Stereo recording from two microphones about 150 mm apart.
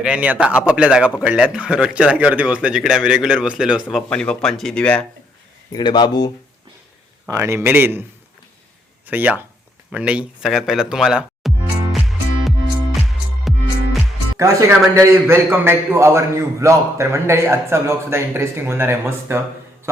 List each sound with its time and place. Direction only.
0.0 s a man's voice: 5° right (ahead or behind)
3.8 s speech: 5° left (ahead or behind)
5.7 s speech: 30° left (ahead or behind)
7.3 s a man's voice: 20° right (ahead or behind)
9.0 s a man's voice: 10° right (ahead or behind)
9.9 s music: 10° right (ahead or behind)
14.8 s a man's voice: 20° right (ahead or behind)